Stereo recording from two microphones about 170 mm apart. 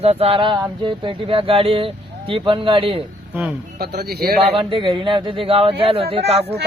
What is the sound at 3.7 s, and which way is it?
Speech, 70° right (ahead or behind).